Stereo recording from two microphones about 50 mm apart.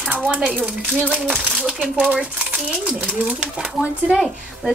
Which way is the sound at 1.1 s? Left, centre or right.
Right.